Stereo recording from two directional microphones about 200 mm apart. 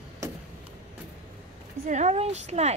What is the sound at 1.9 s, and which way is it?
Speech, 35° right (ahead or behind).